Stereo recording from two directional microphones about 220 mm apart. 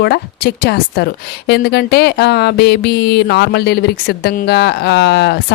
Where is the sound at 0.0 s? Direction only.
45° left (ahead or behind).